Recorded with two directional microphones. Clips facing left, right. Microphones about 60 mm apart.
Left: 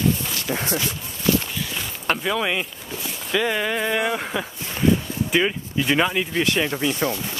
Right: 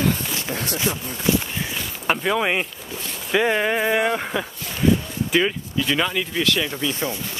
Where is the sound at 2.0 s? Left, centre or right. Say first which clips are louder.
Right 2 dB; centre.